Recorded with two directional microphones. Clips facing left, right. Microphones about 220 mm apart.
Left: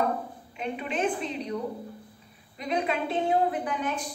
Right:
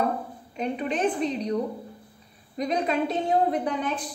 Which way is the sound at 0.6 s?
40° right (ahead or behind).